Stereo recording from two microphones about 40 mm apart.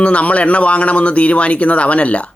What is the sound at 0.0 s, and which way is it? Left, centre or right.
Speech, left.